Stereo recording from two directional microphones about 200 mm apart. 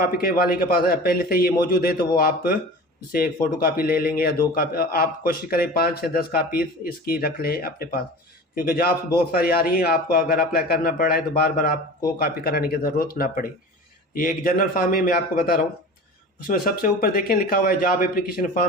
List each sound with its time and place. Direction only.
0.0 s a man's voice: 50° left (ahead or behind)